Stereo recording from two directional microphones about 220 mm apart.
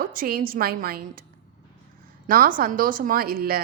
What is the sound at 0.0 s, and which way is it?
Speech, 40° right (ahead or behind).